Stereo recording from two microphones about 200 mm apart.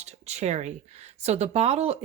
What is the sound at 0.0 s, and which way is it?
A woman's voice, 35° right (ahead or behind).